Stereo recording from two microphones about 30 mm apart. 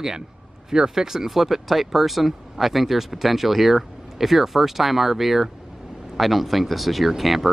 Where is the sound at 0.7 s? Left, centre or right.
Centre.